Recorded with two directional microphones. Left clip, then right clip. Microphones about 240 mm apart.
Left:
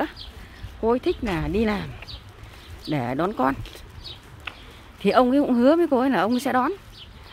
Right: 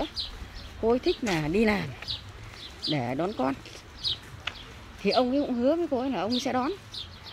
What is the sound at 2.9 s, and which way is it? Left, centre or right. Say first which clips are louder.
Speech: left 4 dB; centre.